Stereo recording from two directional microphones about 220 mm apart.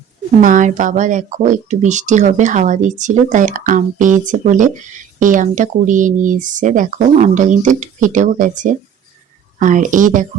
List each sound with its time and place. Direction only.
0.4 s speech: 35° right (ahead or behind)